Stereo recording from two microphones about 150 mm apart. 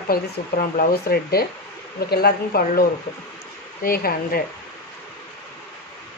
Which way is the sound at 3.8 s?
80° left.